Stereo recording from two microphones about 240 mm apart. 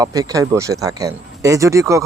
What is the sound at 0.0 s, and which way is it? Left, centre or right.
Speech, centre.